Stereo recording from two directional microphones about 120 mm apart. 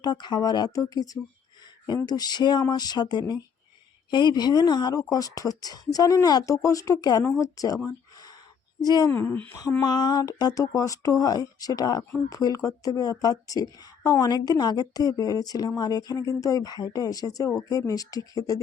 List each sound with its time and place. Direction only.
0.0 s a woman's voice: 35° left (ahead or behind)
7.9 s a sound: 30° left (ahead or behind)
8.8 s a woman's voice: 35° left (ahead or behind)
9.0 s speech: 15° left (ahead or behind)
9.5 s a woman's voice: 30° left (ahead or behind)